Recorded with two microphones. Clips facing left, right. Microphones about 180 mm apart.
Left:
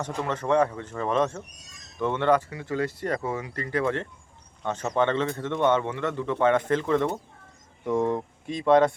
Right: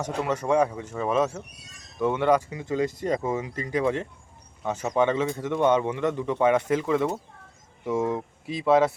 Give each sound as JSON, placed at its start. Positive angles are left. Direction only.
{"t": 0.3, "sound": "a man's voice", "side_deg": -10}